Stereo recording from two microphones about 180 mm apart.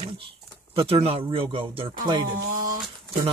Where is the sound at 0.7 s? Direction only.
30° right (ahead or behind).